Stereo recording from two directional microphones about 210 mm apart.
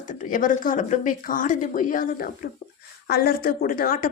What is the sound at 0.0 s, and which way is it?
A woman's voice, 40° left (ahead or behind).